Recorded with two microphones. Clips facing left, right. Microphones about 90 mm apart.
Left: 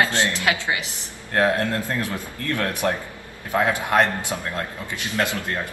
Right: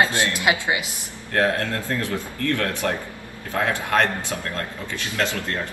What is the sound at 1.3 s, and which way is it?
A man's voice, 20° left (ahead or behind).